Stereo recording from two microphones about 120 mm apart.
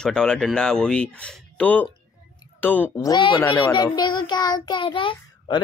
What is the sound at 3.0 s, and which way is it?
Speech, 35° left (ahead or behind).